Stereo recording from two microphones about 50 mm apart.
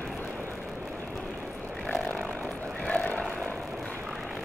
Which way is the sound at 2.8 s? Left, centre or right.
Left.